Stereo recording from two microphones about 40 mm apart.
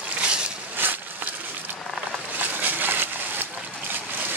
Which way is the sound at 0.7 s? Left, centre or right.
Right.